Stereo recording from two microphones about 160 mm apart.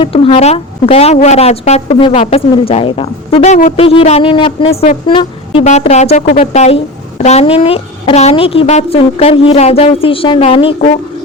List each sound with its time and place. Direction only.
0.0 s a woman's voice: 35° left (ahead or behind)
5.6 s a woman's voice: 45° left (ahead or behind)